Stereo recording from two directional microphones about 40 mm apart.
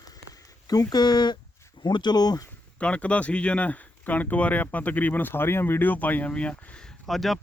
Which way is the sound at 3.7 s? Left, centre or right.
Left.